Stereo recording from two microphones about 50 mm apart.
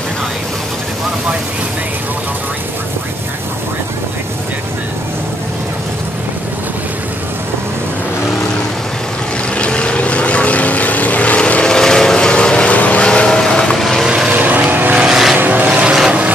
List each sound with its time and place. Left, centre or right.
9.6 s vehicle: centre
14.0 s vehicle: centre
14.3 s vehicle: right
15.0 s vehicle: centre
15.3 s vehicle: right
15.7 s vehicle: right